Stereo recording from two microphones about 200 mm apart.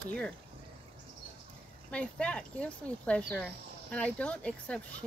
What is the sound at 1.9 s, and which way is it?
Speech, 5° left (ahead or behind).